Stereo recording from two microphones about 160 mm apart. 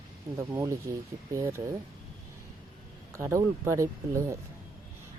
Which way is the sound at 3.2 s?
15° right (ahead or behind).